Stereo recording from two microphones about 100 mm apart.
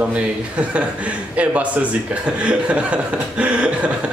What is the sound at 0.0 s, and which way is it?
A man's voice, 15° right (ahead or behind).